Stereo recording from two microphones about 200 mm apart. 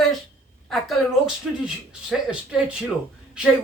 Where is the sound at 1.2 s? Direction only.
5° right (ahead or behind).